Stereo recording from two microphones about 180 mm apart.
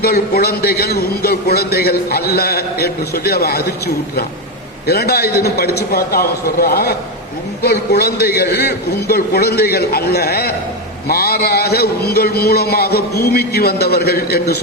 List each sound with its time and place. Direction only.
0.0 s a man's voice: 60° left (ahead or behind)